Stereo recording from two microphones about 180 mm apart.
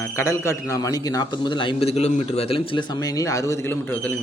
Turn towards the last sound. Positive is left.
turn(degrees=10)  # may be behind; listen again after turning